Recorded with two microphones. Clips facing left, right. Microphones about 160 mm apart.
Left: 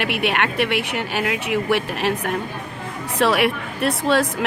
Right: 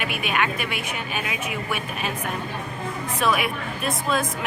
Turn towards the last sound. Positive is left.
turn(degrees=80)